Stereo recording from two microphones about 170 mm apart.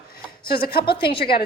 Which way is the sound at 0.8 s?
30° left (ahead or behind).